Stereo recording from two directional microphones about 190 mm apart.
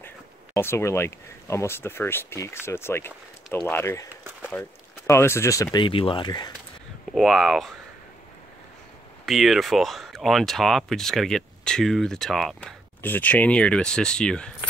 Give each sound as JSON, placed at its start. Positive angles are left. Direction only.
{"t": 0.6, "sound": "speech", "side_deg": 15}
{"t": 7.1, "sound": "speech", "side_deg": 0}
{"t": 9.2, "sound": "speech", "side_deg": 0}